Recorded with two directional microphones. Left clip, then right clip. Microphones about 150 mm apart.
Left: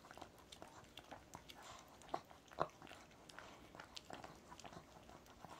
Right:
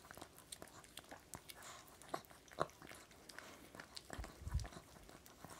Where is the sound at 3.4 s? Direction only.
35° right (ahead or behind).